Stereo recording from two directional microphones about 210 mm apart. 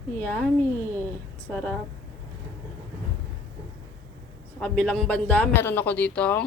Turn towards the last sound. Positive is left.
turn(degrees=5)  # may be behind; listen again after turning